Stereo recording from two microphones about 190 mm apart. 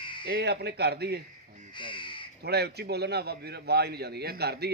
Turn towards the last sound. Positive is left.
turn(degrees=-55)  # may be behind; listen again after turning